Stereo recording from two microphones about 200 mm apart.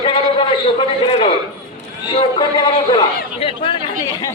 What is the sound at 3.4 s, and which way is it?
Chatter, 25° left (ahead or behind).